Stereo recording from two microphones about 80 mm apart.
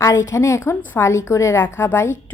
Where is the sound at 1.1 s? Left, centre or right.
Left.